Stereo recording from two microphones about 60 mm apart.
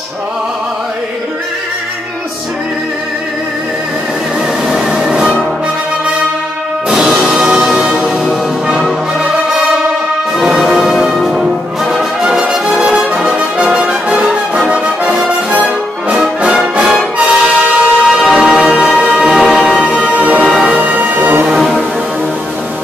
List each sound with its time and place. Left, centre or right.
4.6 s music: centre
6.9 s music: centre
10.3 s music: centre
17.2 s music: centre
18.2 s music: centre
20.4 s music: centre
20.7 s music: right